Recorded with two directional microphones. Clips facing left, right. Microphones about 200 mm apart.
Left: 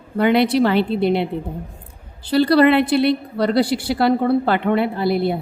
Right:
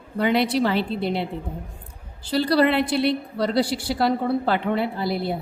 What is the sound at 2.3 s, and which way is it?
A woman's voice, 60° left (ahead or behind).